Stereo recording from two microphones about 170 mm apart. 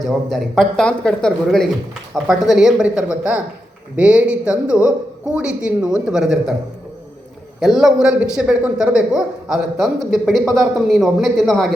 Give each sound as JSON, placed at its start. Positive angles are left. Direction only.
{"t": 0.0, "sound": "a man's voice", "side_deg": 0}
{"t": 7.6, "sound": "a man's voice", "side_deg": 0}